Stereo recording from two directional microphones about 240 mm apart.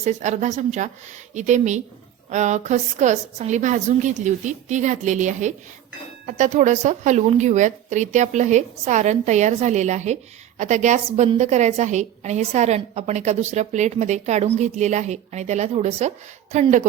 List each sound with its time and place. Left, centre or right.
0.0 s a woman's voice: right